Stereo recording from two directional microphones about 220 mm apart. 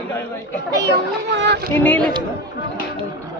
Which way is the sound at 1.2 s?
50° right (ahead or behind).